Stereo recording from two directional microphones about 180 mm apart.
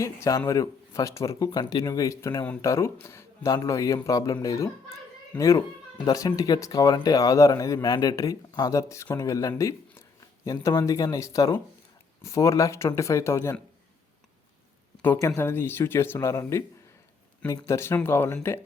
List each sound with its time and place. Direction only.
0.0 s speech: 15° left (ahead or behind)
15.0 s speech: 15° left (ahead or behind)